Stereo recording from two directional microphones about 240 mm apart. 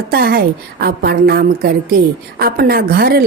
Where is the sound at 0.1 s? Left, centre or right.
Right.